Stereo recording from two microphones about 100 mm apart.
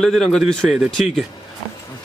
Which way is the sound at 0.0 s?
5° left (ahead or behind).